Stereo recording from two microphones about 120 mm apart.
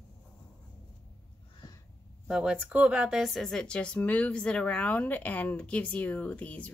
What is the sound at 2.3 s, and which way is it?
Speech, 5° right (ahead or behind).